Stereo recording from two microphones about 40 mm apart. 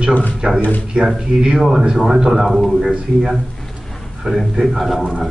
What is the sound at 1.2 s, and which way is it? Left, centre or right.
A man's voice, centre.